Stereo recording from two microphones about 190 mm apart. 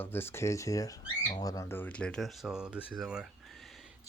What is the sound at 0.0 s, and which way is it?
Speech, 10° left (ahead or behind).